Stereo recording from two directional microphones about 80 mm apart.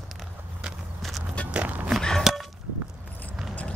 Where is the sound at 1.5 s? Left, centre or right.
Centre.